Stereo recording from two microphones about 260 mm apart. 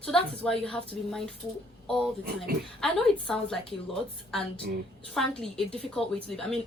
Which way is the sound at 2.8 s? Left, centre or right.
Centre.